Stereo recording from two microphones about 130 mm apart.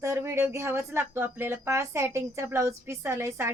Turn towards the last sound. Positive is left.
turn(degrees=-20)  # may be behind; listen again after turning